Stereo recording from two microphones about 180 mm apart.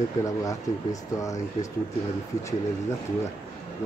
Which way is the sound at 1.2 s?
20° left (ahead or behind).